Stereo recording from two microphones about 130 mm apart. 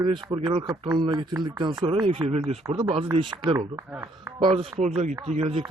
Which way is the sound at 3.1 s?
40° right (ahead or behind).